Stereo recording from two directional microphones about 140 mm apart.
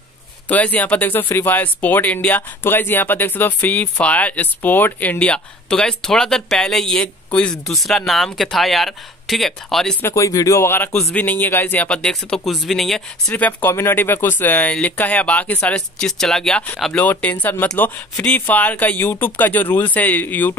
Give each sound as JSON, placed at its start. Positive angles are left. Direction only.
{"t": 0.5, "sound": "speech", "side_deg": 10}
{"t": 10.0, "sound": "speech", "side_deg": 20}
{"t": 10.9, "sound": "speech", "side_deg": 5}
{"t": 13.3, "sound": "speech", "side_deg": 15}